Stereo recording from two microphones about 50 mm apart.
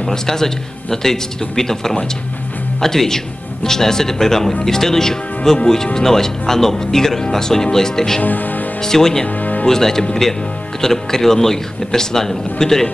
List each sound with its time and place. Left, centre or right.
0.0 s speech: centre
8.2 s speech: left
8.8 s speech: centre
9.4 s music: left
9.7 s speech: centre